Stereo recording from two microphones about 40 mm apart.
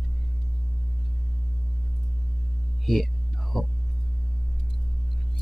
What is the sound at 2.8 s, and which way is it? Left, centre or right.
Music, centre.